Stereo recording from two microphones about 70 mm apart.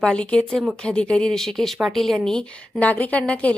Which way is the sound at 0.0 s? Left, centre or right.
Centre.